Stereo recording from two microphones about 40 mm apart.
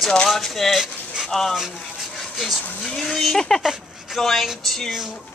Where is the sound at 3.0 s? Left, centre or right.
Centre.